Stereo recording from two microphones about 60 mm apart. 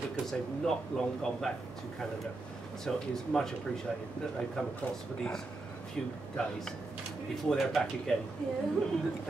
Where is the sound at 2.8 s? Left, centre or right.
Centre.